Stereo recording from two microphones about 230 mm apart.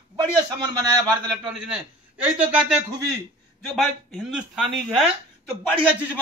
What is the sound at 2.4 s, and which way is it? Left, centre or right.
Speech, centre.